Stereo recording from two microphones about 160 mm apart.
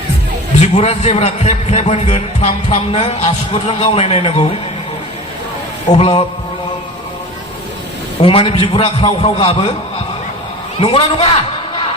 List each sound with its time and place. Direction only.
0.6 s a man's voice: 45° left (ahead or behind)
5.9 s a man's voice: 35° left (ahead or behind)
8.2 s a man's voice: 35° left (ahead or behind)
10.8 s a man's voice: 35° left (ahead or behind)